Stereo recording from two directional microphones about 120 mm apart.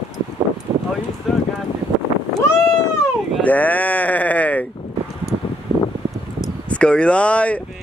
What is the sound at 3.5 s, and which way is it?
Sheep, 15° left (ahead or behind).